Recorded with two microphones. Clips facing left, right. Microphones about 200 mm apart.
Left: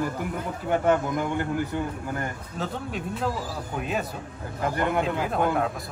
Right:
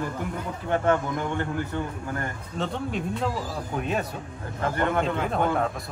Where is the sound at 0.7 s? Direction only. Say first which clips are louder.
Left 1 dB; 10° left (ahead or behind).